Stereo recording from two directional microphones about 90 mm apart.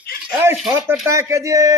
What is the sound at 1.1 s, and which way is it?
Speech, 35° right (ahead or behind).